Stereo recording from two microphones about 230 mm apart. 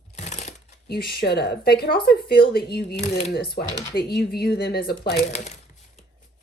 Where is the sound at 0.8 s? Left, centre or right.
Left.